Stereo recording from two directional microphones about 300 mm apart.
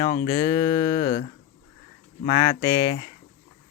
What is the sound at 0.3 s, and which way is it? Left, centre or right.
Speech, centre.